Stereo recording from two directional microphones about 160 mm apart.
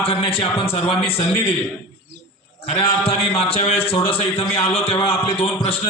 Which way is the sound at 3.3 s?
40° left (ahead or behind).